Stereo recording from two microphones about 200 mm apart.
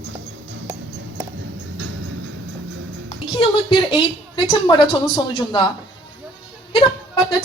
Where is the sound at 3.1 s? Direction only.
25° left (ahead or behind).